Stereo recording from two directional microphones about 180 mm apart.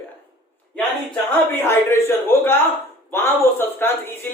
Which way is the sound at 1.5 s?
10° left (ahead or behind).